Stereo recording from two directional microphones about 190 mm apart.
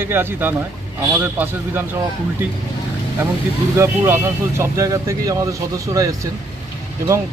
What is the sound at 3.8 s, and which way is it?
Speech, 15° right (ahead or behind).